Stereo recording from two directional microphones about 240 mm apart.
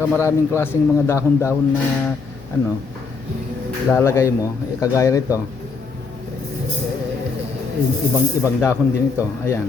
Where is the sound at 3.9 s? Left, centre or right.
Centre.